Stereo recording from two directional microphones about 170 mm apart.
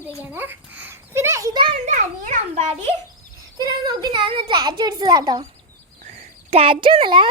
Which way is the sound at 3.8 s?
25° right (ahead or behind).